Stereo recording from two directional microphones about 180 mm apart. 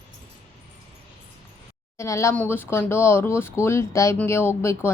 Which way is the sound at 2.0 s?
15° left (ahead or behind).